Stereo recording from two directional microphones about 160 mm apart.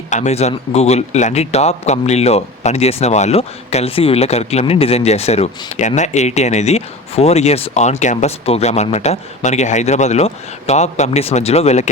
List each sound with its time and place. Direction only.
0.1 s a man's voice: 45° left (ahead or behind)